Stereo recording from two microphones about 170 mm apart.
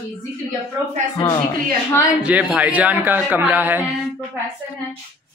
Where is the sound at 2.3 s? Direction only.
5° right (ahead or behind).